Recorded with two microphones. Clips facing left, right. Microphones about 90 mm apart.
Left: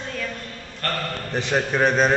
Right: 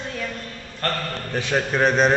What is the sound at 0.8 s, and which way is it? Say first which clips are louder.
Speech: right 2 dB; 30° right (ahead or behind).